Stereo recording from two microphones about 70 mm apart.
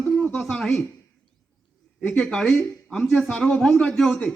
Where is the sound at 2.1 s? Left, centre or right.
Centre.